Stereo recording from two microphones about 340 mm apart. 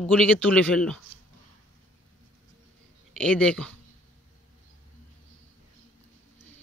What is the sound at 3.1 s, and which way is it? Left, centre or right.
Speech, centre.